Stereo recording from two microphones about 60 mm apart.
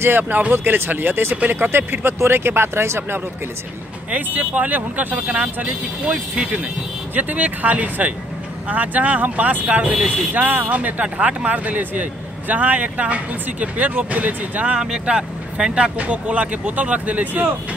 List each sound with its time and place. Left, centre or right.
0.2 s speech: right
4.1 s speech: right